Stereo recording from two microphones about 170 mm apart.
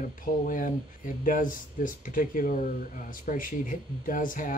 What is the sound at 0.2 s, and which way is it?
Speech, 50° left (ahead or behind).